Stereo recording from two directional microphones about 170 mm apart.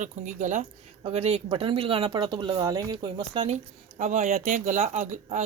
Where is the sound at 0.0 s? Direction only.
45° right (ahead or behind).